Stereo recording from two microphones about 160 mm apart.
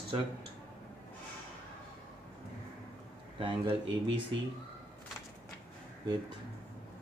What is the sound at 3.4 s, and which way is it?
Speech, 30° right (ahead or behind).